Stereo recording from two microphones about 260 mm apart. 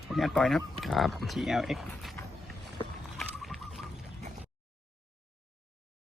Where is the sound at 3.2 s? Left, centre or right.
Centre.